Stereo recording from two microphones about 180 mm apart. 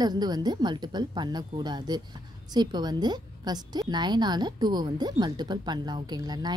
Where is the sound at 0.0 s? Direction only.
20° right (ahead or behind).